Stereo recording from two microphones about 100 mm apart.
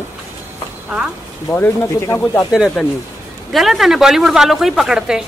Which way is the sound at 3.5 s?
Centre (ahead or behind).